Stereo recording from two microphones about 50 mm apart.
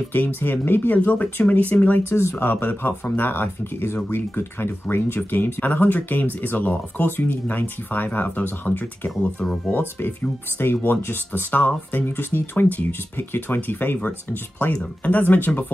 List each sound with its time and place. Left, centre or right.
0.4 s speech: left
2.0 s speech: left
2.4 s speech: left
5.6 s speech: left
11.5 s speech: left